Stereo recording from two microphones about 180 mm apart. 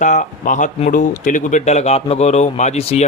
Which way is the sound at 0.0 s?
45° left (ahead or behind).